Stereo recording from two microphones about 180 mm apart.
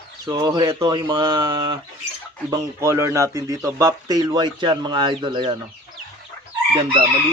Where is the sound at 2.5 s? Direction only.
15° right (ahead or behind).